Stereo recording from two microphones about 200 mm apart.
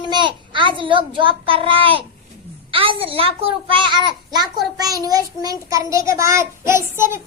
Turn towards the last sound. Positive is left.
turn(degrees=-10)  # may be behind; listen again after turning